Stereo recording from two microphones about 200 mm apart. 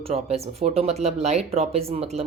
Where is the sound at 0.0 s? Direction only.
30° right (ahead or behind).